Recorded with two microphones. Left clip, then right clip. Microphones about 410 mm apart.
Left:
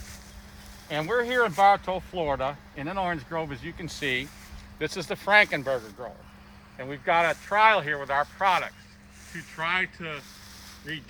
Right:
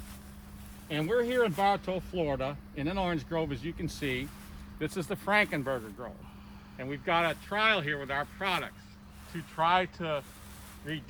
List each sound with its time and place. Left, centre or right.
0.9 s speech: centre; by 6.1 s left
7.0 s speech: centre
9.3 s speech: centre